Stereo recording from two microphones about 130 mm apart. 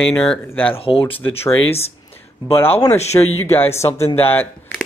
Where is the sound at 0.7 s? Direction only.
45° left (ahead or behind).